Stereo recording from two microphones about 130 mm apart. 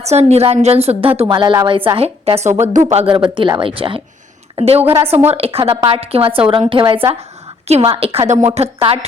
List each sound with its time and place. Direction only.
0.0 s a woman's voice: 55° right (ahead or behind)
1.3 s a woman's voice: 40° right (ahead or behind)